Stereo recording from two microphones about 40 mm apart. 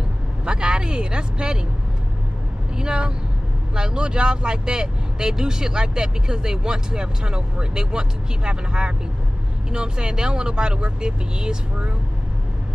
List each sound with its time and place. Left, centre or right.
0.5 s vehicle: right
2.7 s speech: centre